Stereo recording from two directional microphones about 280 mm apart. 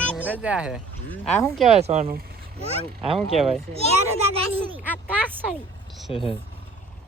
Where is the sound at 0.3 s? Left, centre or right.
Centre.